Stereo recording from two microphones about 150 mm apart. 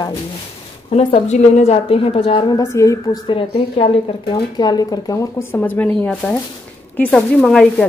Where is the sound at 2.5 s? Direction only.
20° left (ahead or behind).